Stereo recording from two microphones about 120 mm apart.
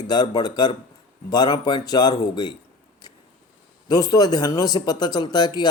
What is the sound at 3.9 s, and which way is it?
Speech, 30° left (ahead or behind).